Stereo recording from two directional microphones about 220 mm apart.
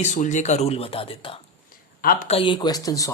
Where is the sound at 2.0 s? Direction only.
40° left (ahead or behind).